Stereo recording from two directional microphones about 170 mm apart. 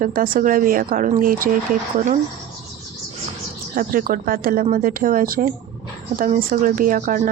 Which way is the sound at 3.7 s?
55° right (ahead or behind).